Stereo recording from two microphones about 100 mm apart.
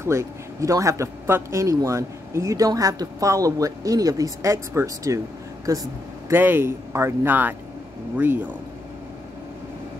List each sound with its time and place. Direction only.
0.0 s a man's voice: 30° right (ahead or behind)
6.3 s speech: 20° right (ahead or behind)